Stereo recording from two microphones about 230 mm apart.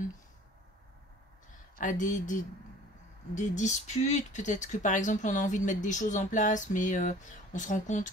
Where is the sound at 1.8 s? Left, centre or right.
Left.